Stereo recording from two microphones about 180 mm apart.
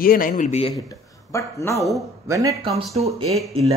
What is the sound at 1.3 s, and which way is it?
Speech, 15° left (ahead or behind).